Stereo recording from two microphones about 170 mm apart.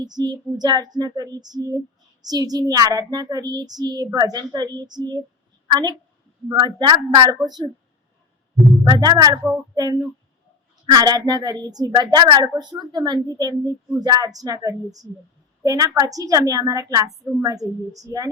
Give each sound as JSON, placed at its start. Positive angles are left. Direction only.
{"t": 0.0, "sound": "a woman's voice", "side_deg": -25}
{"t": 8.8, "sound": "a woman's voice", "side_deg": -20}